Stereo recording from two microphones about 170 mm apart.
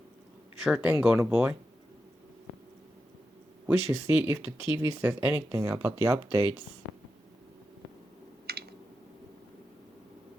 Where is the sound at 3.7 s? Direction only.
15° right (ahead or behind).